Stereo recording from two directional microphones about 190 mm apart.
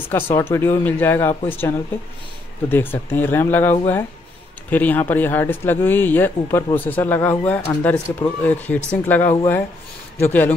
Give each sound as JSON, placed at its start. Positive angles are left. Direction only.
{"t": 0.1, "sound": "speech", "side_deg": 10}